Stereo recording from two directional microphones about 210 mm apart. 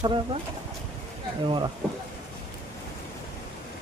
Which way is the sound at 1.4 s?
20° right (ahead or behind).